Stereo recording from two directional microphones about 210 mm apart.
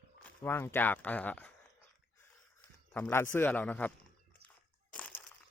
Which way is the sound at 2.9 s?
10° left (ahead or behind).